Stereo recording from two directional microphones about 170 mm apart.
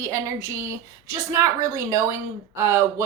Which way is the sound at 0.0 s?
20° right (ahead or behind).